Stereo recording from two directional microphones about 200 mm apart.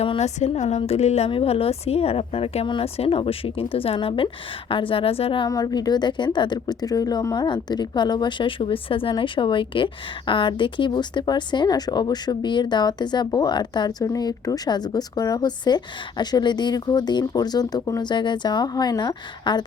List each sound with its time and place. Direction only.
0.0 s a woman's voice: 30° left (ahead or behind)